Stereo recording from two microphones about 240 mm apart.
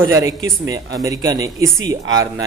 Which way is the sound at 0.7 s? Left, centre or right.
Centre.